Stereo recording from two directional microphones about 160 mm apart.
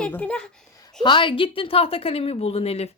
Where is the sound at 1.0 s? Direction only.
30° left (ahead or behind).